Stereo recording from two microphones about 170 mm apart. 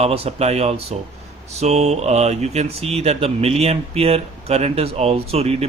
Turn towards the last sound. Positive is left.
turn(degrees=-35)  # may be behind; listen again after turning